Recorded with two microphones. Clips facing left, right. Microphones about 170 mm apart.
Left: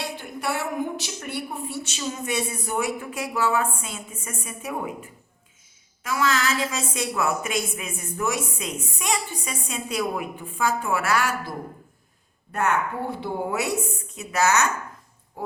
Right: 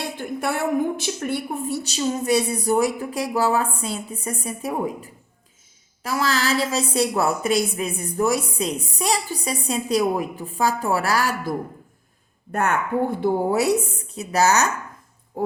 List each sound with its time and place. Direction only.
0.2 s a sound: 50° right (ahead or behind)
0.9 s a woman's voice: 50° right (ahead or behind)
12.5 s a woman's voice: 50° right (ahead or behind)